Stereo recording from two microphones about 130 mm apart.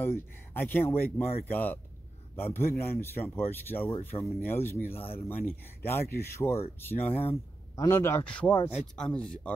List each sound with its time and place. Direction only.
0.0 s speech: 15° left (ahead or behind)
7.7 s a man's voice: 30° left (ahead or behind)
8.3 s speech: 10° left (ahead or behind)